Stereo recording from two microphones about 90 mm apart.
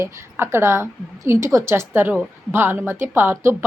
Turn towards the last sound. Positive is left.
turn(degrees=-25)  # may be behind; listen again after turning